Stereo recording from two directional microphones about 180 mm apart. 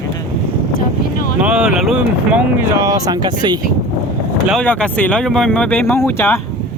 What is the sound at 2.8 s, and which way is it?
Speech, 20° right (ahead or behind).